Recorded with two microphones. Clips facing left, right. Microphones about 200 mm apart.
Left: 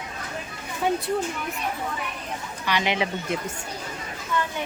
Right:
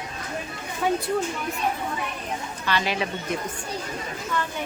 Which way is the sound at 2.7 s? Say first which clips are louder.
Left 1 dB; 15° left (ahead or behind).